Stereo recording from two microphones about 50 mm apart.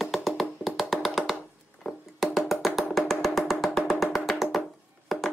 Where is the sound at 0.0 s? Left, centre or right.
Centre.